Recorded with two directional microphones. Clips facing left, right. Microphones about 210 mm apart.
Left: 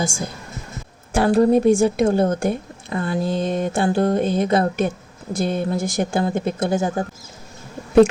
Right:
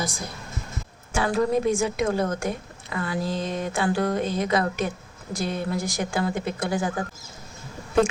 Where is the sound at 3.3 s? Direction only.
55° left (ahead or behind).